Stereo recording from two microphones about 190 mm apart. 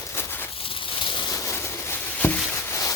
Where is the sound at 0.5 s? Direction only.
30° left (ahead or behind).